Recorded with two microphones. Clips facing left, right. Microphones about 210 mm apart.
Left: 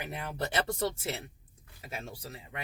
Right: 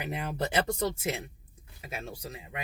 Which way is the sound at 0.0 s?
15° right (ahead or behind).